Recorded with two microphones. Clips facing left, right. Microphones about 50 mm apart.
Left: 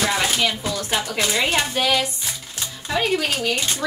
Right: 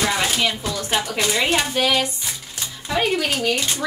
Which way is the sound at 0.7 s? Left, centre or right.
Centre.